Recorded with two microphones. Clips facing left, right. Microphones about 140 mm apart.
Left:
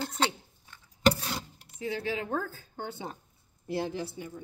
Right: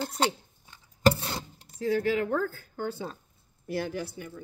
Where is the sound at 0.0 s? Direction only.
10° right (ahead or behind).